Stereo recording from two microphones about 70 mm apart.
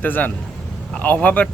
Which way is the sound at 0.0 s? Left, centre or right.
Left.